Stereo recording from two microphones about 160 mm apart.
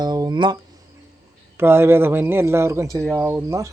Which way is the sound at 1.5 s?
15° right (ahead or behind).